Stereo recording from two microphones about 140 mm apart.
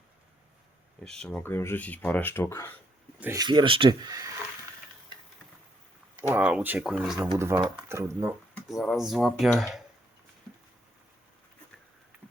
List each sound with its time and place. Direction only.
1.0 s speech: 5° left (ahead or behind)
1.5 s speech: 15° left (ahead or behind)
3.3 s speech: 30° right (ahead or behind)
6.2 s speech: 10° right (ahead or behind)
7.3 s speech: 20° right (ahead or behind)
8.7 s speech: centre (ahead or behind)